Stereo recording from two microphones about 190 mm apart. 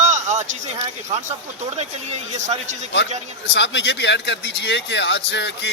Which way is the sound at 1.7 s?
35° right (ahead or behind).